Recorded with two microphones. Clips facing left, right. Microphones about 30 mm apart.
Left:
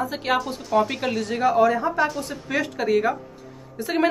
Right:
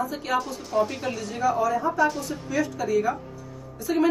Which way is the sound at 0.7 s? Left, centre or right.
Centre.